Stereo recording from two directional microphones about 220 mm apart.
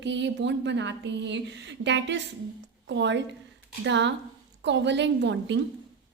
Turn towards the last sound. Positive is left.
turn(degrees=-55)  # may be behind; listen again after turning